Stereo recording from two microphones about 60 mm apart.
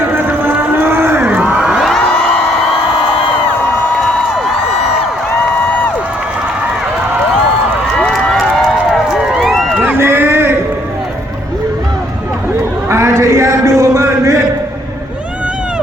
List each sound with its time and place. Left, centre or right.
0.2 s cattle: right; by 1.8 s centre
7.9 s a sound: centre
9.0 s run: centre
9.4 s run: centre
9.8 s run: right
12.9 s a sound: right